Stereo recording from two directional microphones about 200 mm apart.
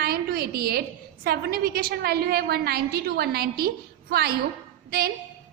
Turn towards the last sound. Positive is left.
turn(degrees=-50)  # may be behind; listen again after turning